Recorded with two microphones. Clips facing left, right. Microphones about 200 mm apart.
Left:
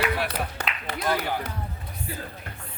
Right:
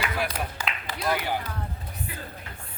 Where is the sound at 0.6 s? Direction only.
60° left (ahead or behind).